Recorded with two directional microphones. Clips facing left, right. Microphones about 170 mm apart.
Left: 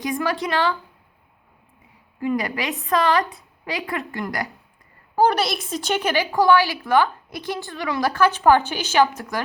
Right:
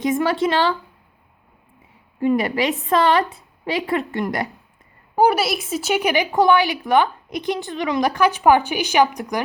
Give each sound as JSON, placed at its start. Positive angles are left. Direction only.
{"t": 0.0, "sound": "a woman's voice", "side_deg": -25}
{"t": 2.1, "sound": "a woman's voice", "side_deg": -25}
{"t": 5.1, "sound": "speech", "side_deg": -10}